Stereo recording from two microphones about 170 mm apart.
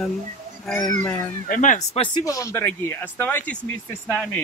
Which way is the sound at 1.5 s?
45° left (ahead or behind).